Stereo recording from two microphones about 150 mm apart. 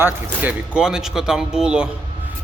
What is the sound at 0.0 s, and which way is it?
Speech, 10° right (ahead or behind).